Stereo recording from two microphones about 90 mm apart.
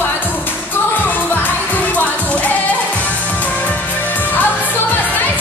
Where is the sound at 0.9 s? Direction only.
20° left (ahead or behind).